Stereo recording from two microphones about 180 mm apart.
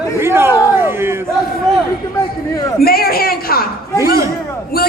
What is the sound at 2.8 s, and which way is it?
Speech, 55° left (ahead or behind).